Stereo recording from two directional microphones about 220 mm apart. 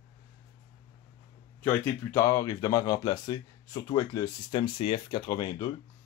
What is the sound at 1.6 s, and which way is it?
Speech, 10° left (ahead or behind).